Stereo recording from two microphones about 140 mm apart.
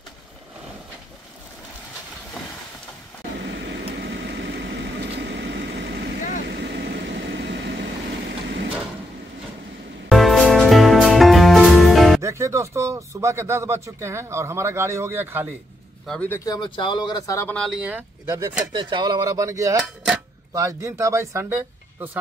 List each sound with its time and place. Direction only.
10.0 s music: centre (ahead or behind)
12.2 s speech: 20° right (ahead or behind)
16.1 s speech: 10° left (ahead or behind)
16.3 s speech: 25° left (ahead or behind)
17.5 s speech: 5° left (ahead or behind)
17.7 s speech: 10° right (ahead or behind)
18.2 s speech: 20° right (ahead or behind)
18.7 s speech: 35° right (ahead or behind)